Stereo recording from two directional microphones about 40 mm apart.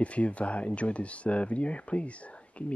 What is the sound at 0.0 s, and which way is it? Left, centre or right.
Speech, left.